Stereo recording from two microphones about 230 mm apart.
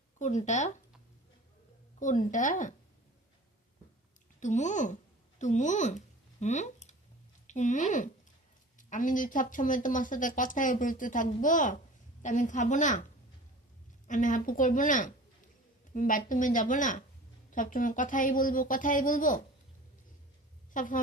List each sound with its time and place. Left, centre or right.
0.2 s speech: left
2.0 s speech: left
4.4 s a child's voice: left
14.1 s speech: left
20.7 s speech: left